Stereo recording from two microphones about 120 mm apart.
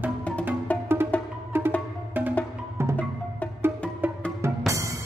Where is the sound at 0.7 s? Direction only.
10° left (ahead or behind).